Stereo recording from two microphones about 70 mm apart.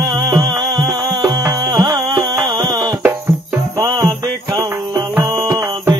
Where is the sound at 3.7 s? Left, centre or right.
Right.